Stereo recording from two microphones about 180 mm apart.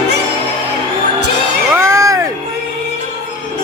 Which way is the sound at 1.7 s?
15° right (ahead or behind).